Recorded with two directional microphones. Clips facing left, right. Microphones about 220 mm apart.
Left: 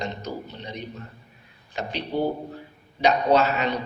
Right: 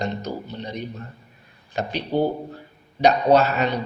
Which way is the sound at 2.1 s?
35° right (ahead or behind).